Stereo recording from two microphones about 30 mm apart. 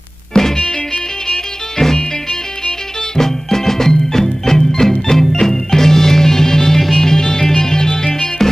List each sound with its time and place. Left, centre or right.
0.3 s music: left
3.2 s music: centre